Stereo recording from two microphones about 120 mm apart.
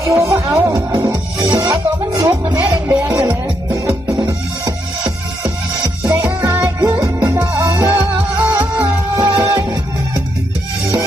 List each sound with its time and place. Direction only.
0.0 s speech: 20° right (ahead or behind)
3.2 s music: 25° right (ahead or behind)
5.8 s music: 25° right (ahead or behind)
8.4 s music: 15° right (ahead or behind)
9.1 s music: 35° right (ahead or behind)
9.4 s music: 25° right (ahead or behind)